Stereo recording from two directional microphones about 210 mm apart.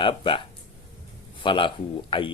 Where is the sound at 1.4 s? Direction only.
25° left (ahead or behind).